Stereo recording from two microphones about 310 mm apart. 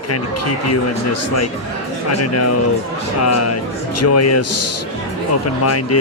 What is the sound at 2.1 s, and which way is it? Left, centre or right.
Speech, left.